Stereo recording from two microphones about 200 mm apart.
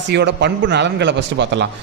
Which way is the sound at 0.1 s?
60° right (ahead or behind).